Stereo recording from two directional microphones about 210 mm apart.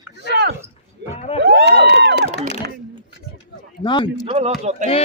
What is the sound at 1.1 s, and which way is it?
Speech, 30° left (ahead or behind).